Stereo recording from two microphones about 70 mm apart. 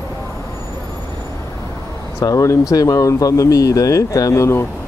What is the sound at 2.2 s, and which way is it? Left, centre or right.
Speech, left.